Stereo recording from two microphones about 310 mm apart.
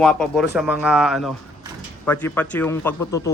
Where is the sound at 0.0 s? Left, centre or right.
Centre.